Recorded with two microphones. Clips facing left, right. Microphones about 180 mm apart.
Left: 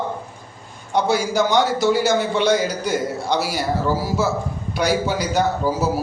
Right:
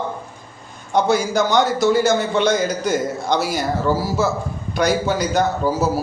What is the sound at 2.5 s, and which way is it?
Speech, 45° right (ahead or behind).